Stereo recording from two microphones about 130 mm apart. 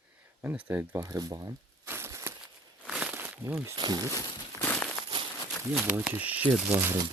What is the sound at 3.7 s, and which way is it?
Speech, 30° right (ahead or behind).